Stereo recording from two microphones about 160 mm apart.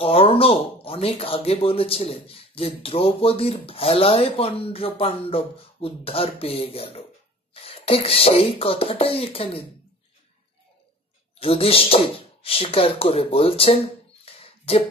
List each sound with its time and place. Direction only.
0.0 s speech: 35° left (ahead or behind)
11.3 s speech: 35° left (ahead or behind)
14.2 s a sound: 35° left (ahead or behind)